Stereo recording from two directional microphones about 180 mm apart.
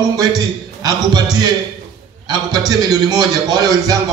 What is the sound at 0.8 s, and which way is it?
A man's voice, 20° right (ahead or behind).